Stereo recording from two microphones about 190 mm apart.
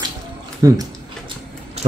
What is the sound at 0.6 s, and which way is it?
Speech, 20° right (ahead or behind).